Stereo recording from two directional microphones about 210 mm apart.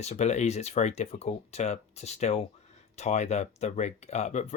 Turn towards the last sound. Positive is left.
turn(degrees=35)  # may be behind; listen again after turning